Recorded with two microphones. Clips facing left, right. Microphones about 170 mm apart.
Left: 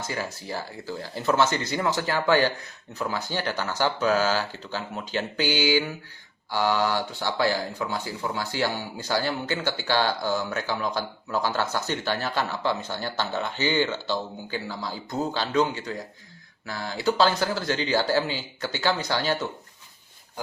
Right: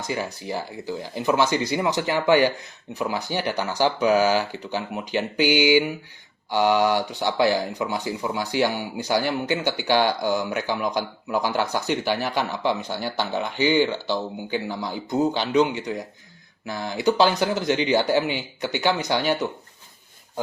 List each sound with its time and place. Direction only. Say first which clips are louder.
0.0 s speech: right 3 dB; 20° right (ahead or behind)